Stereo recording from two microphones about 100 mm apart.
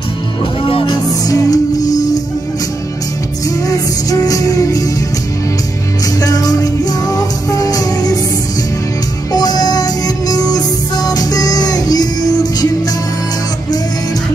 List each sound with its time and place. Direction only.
0.8 s music: 40° left (ahead or behind)
3.6 s music: 35° left (ahead or behind)
6.2 s music: 35° left (ahead or behind)
9.3 s music: 40° left (ahead or behind)